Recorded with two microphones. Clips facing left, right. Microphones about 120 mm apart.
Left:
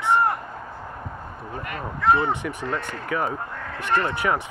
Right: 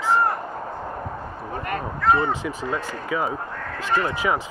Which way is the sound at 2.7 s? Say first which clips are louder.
Right 1 dB; 15° right (ahead or behind).